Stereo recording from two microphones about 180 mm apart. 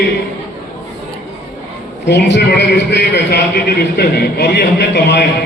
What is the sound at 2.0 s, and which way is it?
A man's voice, 75° left (ahead or behind).